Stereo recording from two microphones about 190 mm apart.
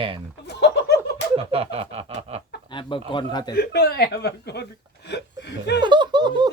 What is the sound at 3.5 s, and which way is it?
Speech, 55° left (ahead or behind).